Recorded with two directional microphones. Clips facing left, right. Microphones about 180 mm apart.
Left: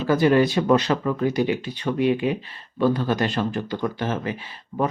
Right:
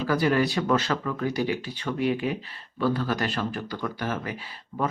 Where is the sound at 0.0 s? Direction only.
20° left (ahead or behind).